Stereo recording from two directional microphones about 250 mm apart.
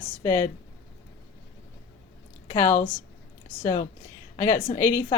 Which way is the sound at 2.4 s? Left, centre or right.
Centre.